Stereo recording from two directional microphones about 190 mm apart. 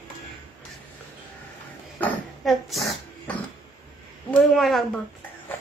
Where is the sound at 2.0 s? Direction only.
5° left (ahead or behind).